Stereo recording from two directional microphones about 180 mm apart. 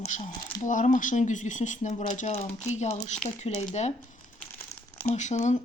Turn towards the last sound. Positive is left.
turn(degrees=40)  # may be behind; listen again after turning